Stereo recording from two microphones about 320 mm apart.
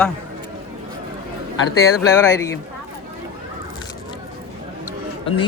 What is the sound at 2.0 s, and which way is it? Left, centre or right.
Speech, centre.